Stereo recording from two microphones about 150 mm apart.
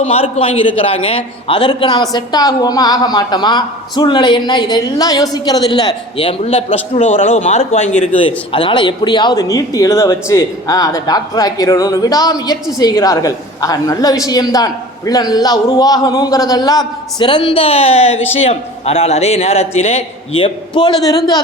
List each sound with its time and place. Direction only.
0.0 s a man's voice: 40° left (ahead or behind)
8.5 s a man's voice: 30° left (ahead or behind)